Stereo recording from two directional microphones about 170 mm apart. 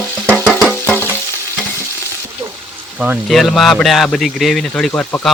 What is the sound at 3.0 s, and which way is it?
Speech, 5° right (ahead or behind).